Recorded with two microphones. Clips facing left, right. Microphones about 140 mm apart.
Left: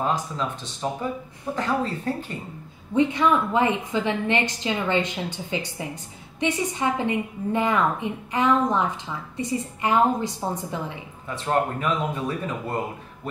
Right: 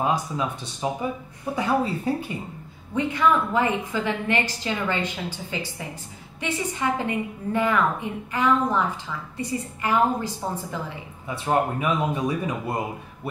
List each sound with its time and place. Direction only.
0.0 s speech: 10° right (ahead or behind)
2.9 s a woman's voice: 20° left (ahead or behind)
11.2 s speech: 10° right (ahead or behind)